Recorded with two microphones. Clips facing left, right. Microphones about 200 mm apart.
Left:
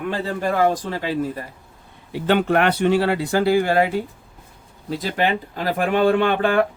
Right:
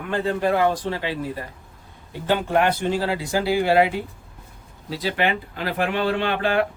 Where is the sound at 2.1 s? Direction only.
70° left (ahead or behind).